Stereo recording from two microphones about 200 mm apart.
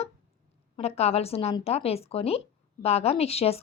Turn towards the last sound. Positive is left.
turn(degrees=30)  # may be behind; listen again after turning